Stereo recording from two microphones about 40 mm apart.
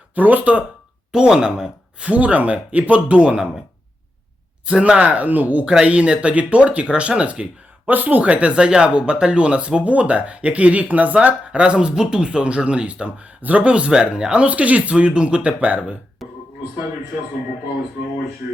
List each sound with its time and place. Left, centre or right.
0.1 s speech: right
1.1 s speech: right
4.6 s speech: right
5.8 s speech: right
7.4 s speech: centre
7.9 s speech: right
11.6 s speech: right
13.9 s speech: right
14.4 s speech: right
14.9 s speech: right
16.2 s music: centre